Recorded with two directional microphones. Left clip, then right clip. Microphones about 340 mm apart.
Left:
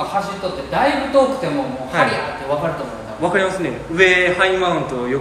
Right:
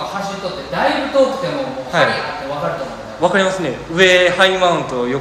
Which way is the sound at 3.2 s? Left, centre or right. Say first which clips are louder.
Right 3 dB; centre.